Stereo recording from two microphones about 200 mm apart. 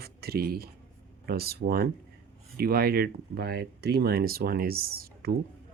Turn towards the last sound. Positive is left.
turn(degrees=-50)  # may be behind; listen again after turning